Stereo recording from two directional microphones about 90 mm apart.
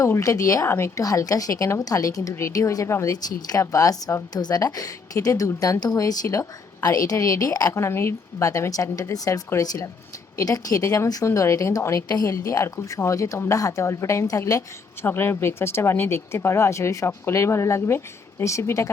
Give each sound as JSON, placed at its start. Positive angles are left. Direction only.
{"t": 0.0, "sound": "a woman's voice", "side_deg": 40}
{"t": 7.8, "sound": "a woman's voice", "side_deg": 30}
{"t": 15.0, "sound": "speech", "side_deg": 25}